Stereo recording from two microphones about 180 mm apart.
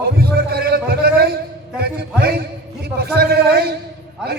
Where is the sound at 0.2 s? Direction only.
55° right (ahead or behind).